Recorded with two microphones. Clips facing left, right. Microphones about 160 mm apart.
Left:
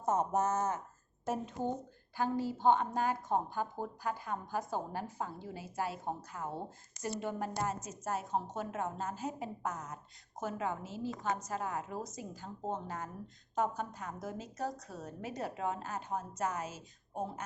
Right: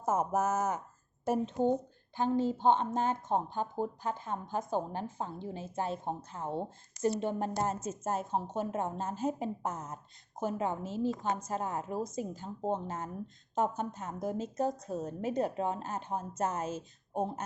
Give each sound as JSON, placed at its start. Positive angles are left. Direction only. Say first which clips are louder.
{"t": 0.0, "sound": "a woman's voice", "louder": "right 1 dB", "side_deg": -5}